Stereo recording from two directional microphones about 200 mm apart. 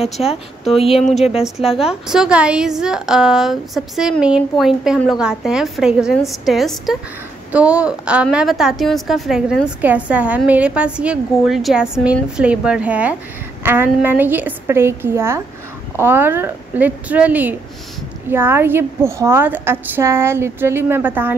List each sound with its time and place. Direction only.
0.0 s a woman's voice: 30° left (ahead or behind)
1.8 s a woman's voice: 5° right (ahead or behind)